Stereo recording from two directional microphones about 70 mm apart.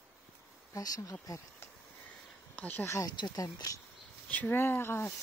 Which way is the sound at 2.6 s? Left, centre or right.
Left.